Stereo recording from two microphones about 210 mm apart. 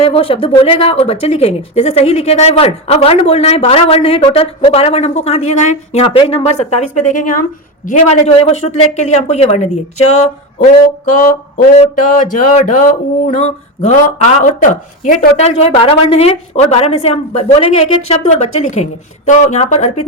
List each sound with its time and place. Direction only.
0.0 s a woman's voice: 25° left (ahead or behind)
11.0 s a woman's voice: 35° left (ahead or behind)
14.6 s a woman's voice: 40° left (ahead or behind)